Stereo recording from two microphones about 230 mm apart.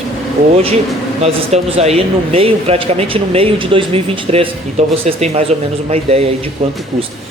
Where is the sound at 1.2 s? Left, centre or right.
Right.